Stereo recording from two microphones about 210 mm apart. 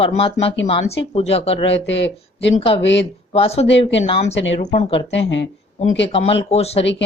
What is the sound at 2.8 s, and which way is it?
Speech, 55° left (ahead or behind).